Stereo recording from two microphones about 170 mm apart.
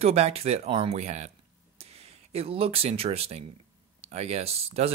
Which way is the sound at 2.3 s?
35° right (ahead or behind).